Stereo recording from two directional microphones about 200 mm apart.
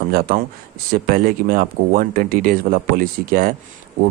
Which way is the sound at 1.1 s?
45° right (ahead or behind).